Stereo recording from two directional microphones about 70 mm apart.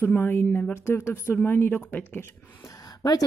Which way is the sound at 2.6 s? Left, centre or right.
Left.